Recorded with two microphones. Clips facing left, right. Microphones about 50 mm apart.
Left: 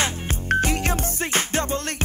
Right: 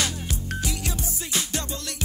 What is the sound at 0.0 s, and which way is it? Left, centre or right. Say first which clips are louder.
Music: left 3 dB; left.